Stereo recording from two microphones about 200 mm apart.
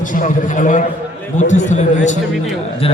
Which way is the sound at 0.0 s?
40° left (ahead or behind).